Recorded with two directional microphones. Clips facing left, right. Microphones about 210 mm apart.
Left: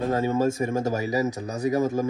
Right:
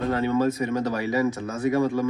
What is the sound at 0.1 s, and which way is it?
Speech, 45° left (ahead or behind).